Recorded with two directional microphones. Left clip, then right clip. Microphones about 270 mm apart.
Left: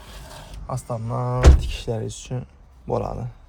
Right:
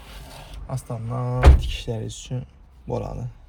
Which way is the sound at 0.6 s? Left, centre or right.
Left.